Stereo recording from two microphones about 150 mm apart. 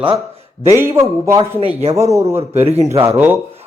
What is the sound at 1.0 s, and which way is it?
A man's voice, 20° right (ahead or behind).